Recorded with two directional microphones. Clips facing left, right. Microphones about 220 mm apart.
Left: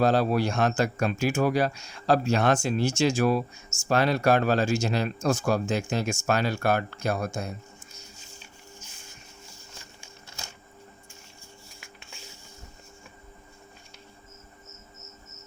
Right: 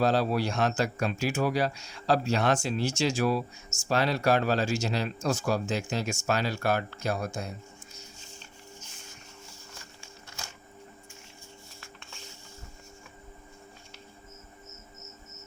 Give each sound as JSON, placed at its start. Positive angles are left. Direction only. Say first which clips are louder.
{"t": 0.0, "sound": "speech", "louder": "left 3 dB", "side_deg": 50}